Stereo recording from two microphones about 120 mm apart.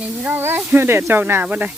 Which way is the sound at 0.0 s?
15° right (ahead or behind).